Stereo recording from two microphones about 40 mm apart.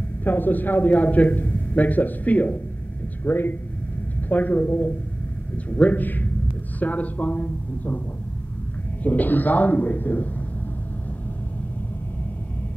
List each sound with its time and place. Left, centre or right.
0.2 s a man's voice: left
3.3 s a man's voice: left
4.3 s a man's voice: left
9.0 s a man's voice: left